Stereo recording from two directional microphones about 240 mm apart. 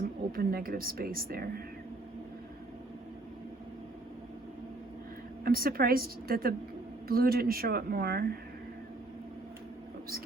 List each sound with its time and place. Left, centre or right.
0.3 s speech: right
5.5 s speech: right